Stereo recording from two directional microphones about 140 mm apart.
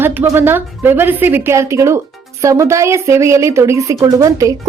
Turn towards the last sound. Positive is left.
turn(degrees=-25)  # may be behind; listen again after turning